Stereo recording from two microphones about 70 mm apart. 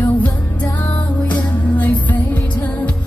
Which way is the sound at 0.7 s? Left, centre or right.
Left.